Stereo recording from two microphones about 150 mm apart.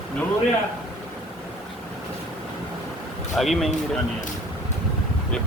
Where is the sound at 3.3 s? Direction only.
Centre (ahead or behind).